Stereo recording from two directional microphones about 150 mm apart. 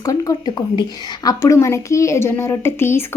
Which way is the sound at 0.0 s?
25° left (ahead or behind).